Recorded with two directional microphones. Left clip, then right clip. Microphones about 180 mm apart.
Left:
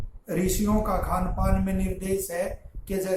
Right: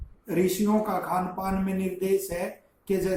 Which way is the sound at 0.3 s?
15° left (ahead or behind).